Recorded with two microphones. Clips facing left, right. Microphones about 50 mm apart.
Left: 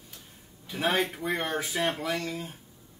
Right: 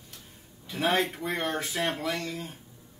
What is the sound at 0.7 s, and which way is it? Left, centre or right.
Speech, centre.